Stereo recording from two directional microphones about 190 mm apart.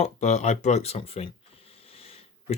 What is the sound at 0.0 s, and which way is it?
Speech, 35° left (ahead or behind).